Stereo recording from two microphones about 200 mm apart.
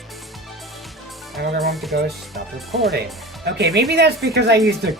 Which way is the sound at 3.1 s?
Centre (ahead or behind).